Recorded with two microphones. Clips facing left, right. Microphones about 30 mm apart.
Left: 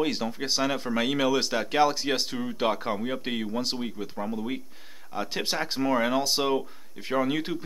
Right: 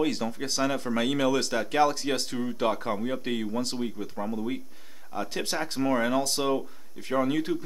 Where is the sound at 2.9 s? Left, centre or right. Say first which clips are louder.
Even; centre.